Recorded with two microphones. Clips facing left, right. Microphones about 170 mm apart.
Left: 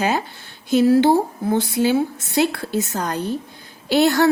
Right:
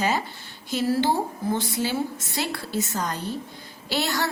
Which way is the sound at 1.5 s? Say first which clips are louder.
Left 9 dB; 65° left (ahead or behind).